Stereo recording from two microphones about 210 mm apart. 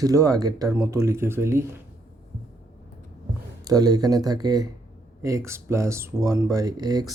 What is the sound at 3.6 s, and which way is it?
Speech, 20° right (ahead or behind).